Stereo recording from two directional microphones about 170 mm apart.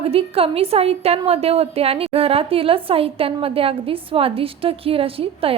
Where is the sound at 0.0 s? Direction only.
35° right (ahead or behind).